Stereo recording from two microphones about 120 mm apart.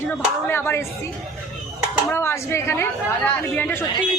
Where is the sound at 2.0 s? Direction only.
20° left (ahead or behind).